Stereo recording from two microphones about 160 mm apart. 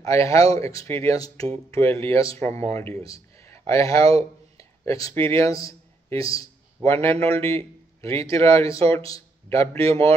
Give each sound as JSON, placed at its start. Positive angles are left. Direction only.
{"t": 0.0, "sound": "a man's voice", "side_deg": 20}
{"t": 9.8, "sound": "a man's voice", "side_deg": -40}